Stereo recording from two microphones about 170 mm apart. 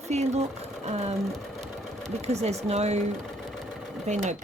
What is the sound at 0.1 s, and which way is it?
Speech, 40° right (ahead or behind).